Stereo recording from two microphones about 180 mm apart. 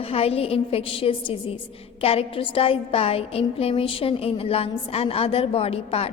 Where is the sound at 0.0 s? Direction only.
35° left (ahead or behind).